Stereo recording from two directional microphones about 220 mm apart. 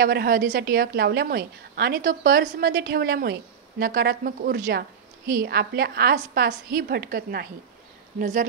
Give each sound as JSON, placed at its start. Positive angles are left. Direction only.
{"t": 0.0, "sound": "a woman's voice", "side_deg": -45}